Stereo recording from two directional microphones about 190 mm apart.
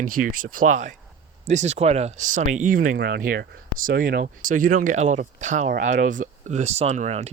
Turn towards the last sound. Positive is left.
turn(degrees=-35)  # may be behind; listen again after turning